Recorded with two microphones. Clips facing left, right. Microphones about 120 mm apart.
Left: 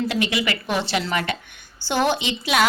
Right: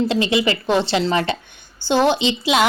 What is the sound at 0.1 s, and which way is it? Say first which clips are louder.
A woman's voice: right 5 dB; 25° right (ahead or behind).